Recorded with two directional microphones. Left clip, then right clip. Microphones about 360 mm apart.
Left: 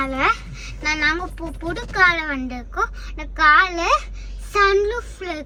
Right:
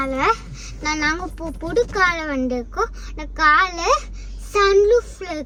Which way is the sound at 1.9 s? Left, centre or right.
Centre.